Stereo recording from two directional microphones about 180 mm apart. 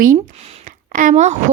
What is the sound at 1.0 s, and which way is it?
Speech, 40° right (ahead or behind).